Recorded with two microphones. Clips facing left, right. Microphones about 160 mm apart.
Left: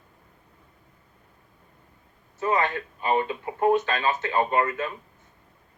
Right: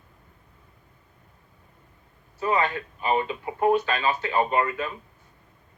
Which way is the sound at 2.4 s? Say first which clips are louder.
Even; 10° right (ahead or behind).